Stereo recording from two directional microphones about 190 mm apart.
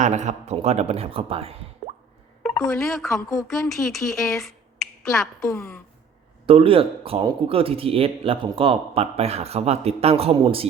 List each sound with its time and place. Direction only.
0.0 s speech: 40° right (ahead or behind)
2.4 s speech: centre (ahead or behind)
3.1 s a woman's voice: 15° left (ahead or behind)
3.3 s speech: centre (ahead or behind)
5.4 s a woman's voice: 15° left (ahead or behind)
6.4 s a man's voice: 30° right (ahead or behind)